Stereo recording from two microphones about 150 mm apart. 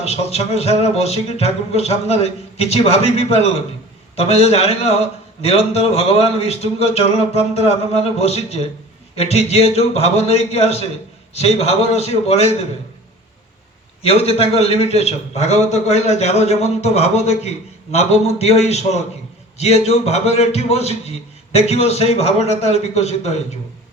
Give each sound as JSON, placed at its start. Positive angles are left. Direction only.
{"t": 0.0, "sound": "a man's voice", "side_deg": 45}
{"t": 14.0, "sound": "a man's voice", "side_deg": 40}